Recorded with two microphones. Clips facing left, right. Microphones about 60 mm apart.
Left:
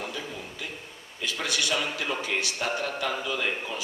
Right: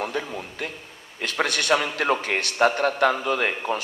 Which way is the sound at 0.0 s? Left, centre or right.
Right.